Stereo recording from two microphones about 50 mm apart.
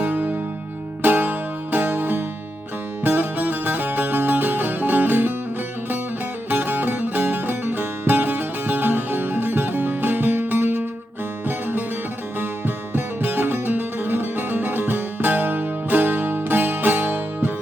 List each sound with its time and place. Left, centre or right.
0.0 s music: right
6.5 s music: right
12.4 s music: right